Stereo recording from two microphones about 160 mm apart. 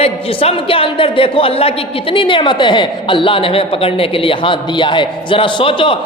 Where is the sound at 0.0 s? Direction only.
40° left (ahead or behind).